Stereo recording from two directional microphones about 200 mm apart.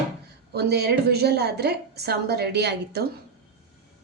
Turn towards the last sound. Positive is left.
turn(degrees=-55)  # may be behind; listen again after turning